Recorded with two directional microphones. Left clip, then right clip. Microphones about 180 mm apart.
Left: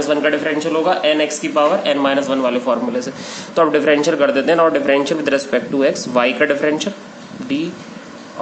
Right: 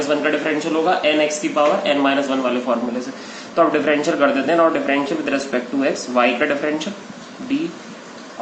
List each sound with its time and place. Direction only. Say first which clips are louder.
0.1 s a man's voice: left 3 dB; 60° left (ahead or behind)